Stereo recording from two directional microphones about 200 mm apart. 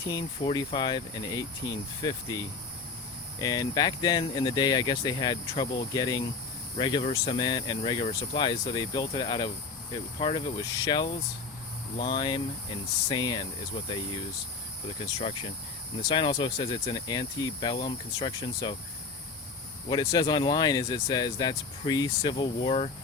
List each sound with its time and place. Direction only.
0.1 s speech: 20° left (ahead or behind)
15.2 s speech: 25° left (ahead or behind)
19.9 s speech: 20° left (ahead or behind)